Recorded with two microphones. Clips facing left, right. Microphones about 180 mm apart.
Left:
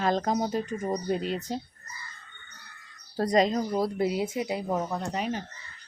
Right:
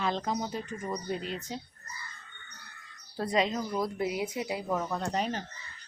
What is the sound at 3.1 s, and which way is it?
Speech, 40° left (ahead or behind).